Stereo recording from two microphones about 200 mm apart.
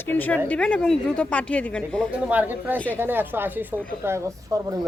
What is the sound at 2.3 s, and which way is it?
Speech, 10° right (ahead or behind).